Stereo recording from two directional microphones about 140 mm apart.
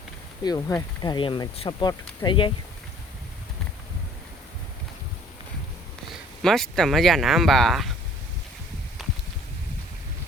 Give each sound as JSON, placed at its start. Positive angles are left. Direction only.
{"t": 0.4, "sound": "speech", "side_deg": 25}
{"t": 6.4, "sound": "speech", "side_deg": 5}
{"t": 9.0, "sound": "a sound", "side_deg": 0}